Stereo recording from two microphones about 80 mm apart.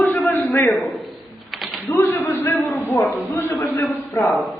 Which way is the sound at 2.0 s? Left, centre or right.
Left.